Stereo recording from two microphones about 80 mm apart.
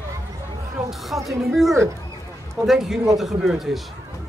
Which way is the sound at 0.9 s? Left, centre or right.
Centre.